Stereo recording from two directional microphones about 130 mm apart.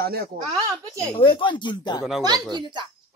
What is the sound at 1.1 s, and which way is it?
Speech, 40° left (ahead or behind).